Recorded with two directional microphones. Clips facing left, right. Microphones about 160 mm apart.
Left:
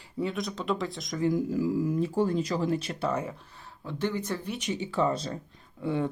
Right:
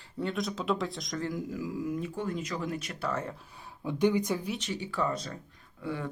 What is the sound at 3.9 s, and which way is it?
Speech, 15° right (ahead or behind).